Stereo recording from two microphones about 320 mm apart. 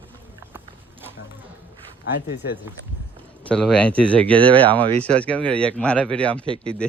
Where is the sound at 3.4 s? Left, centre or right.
Centre.